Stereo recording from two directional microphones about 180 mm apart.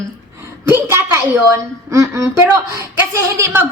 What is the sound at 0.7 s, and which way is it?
A woman's voice, 15° right (ahead or behind).